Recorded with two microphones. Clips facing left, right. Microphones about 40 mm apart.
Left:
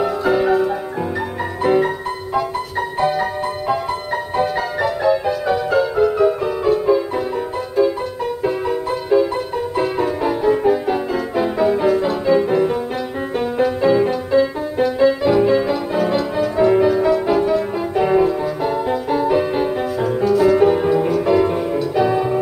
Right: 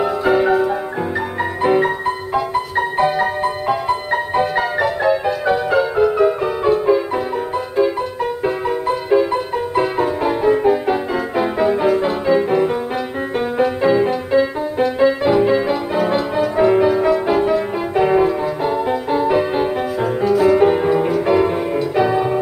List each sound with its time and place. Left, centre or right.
0.0 s music: right